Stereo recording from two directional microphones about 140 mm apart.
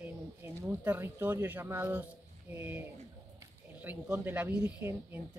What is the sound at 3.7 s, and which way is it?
Speech, 10° right (ahead or behind).